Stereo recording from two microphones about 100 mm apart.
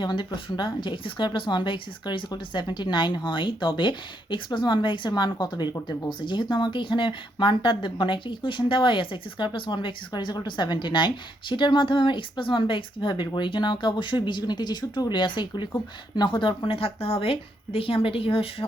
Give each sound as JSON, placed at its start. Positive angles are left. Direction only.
{"t": 0.0, "sound": "speech", "side_deg": 50}